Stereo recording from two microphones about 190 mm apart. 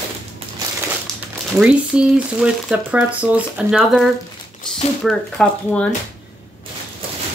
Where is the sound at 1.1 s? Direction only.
Centre (ahead or behind).